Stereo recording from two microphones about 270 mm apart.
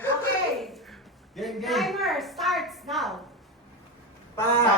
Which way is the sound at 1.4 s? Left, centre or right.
Centre.